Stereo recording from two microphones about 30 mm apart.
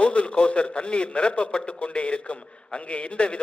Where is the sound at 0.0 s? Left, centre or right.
Left.